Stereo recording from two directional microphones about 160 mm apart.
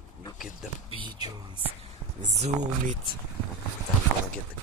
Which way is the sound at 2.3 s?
45° right (ahead or behind).